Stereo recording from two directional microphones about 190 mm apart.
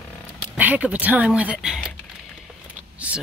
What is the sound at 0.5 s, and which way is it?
Speech, 10° right (ahead or behind).